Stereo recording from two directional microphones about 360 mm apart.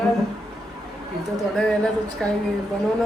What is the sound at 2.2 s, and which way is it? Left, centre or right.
Speech, centre.